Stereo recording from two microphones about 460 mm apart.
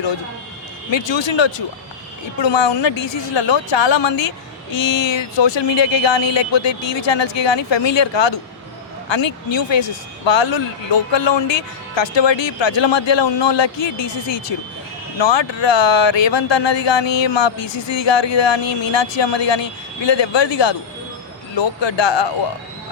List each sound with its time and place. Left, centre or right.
0.9 s a man's voice: left